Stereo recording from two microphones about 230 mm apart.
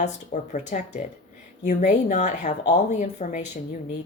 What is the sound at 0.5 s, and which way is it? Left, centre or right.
Speech, left.